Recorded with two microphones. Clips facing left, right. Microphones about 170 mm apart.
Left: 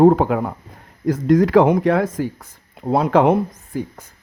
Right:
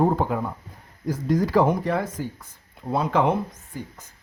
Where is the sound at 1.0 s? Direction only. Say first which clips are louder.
Left 8 dB; 90° left.